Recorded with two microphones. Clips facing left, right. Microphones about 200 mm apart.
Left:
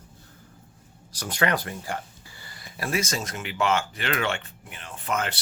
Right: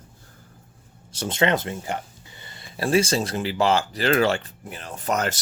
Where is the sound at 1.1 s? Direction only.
25° right (ahead or behind).